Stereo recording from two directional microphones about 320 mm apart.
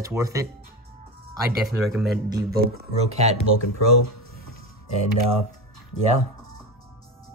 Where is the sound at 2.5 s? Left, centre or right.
Right.